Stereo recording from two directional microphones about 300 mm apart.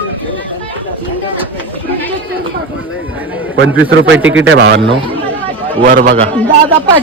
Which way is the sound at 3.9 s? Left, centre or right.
Right.